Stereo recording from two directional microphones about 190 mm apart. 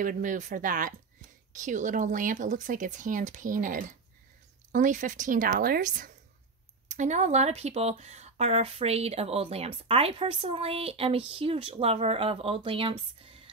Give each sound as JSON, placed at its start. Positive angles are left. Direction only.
{"t": 0.0, "sound": "speech", "side_deg": -45}